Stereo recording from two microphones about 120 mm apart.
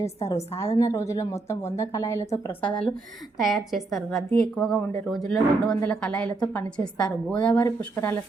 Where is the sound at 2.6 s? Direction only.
5° left (ahead or behind).